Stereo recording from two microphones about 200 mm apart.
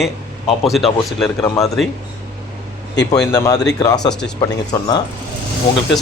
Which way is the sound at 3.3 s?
20° left (ahead or behind).